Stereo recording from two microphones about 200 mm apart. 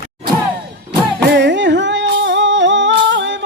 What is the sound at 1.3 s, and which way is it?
Humming, 60° right (ahead or behind).